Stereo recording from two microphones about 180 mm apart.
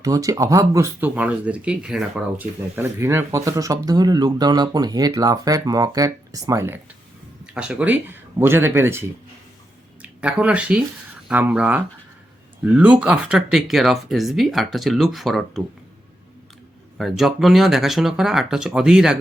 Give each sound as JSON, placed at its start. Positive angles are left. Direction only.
{"t": 0.0, "sound": "speech", "side_deg": -20}
{"t": 7.4, "sound": "speech", "side_deg": -5}
{"t": 17.0, "sound": "speech", "side_deg": 0}